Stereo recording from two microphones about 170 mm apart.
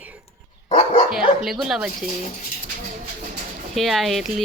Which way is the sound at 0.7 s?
45° left (ahead or behind).